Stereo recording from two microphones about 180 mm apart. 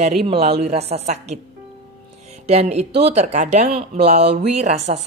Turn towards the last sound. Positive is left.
turn(degrees=-40)  # may be behind; listen again after turning